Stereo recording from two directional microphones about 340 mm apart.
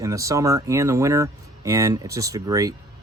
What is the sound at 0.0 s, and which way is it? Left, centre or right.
Speech, centre.